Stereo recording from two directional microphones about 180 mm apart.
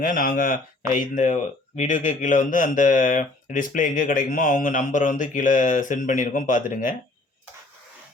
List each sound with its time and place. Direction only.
0.0 s speech: 50° left (ahead or behind)